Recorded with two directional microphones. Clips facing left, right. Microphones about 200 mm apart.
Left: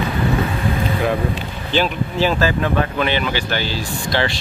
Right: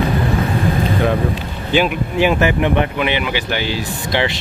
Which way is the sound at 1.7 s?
15° right (ahead or behind).